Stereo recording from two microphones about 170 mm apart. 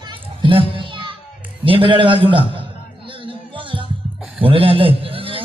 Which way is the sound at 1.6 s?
30° right (ahead or behind).